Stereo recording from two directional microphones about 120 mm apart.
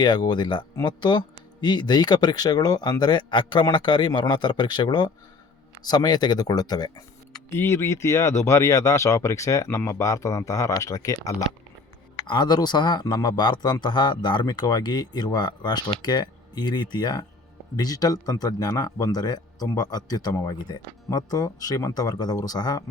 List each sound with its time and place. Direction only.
0.0 s speech: 35° left (ahead or behind)
7.5 s speech: 20° left (ahead or behind)
12.2 s speech: 40° left (ahead or behind)